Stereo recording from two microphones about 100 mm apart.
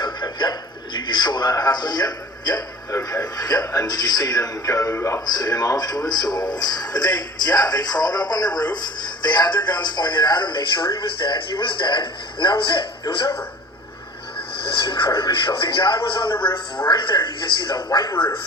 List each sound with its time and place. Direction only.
0.0 s a sound: 45° left (ahead or behind)
3.3 s a man's voice: 40° left (ahead or behind)
5.2 s speech: 45° left (ahead or behind); by 13.3 s 60° left (ahead or behind)
14.8 s speech: 55° left (ahead or behind)